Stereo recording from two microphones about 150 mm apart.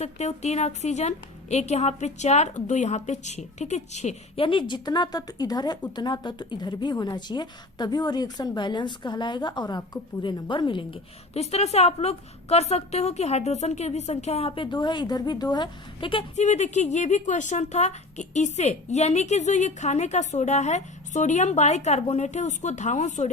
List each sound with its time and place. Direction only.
0.0 s speech: 50° left (ahead or behind)
4.4 s a woman's voice: 30° left (ahead or behind)
16.3 s speech: 50° left (ahead or behind)